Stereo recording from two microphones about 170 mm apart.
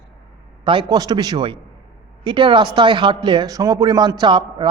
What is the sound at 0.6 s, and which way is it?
A man's voice, 30° right (ahead or behind).